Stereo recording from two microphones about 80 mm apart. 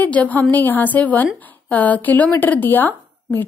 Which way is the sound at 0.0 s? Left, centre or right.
Centre.